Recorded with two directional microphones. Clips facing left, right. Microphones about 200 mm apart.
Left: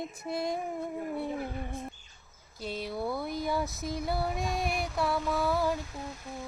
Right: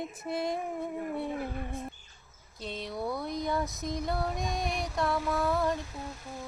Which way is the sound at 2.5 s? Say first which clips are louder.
Left 2 dB; 5° left (ahead or behind).